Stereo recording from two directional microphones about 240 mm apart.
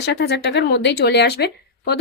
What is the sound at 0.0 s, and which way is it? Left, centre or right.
Speech, left.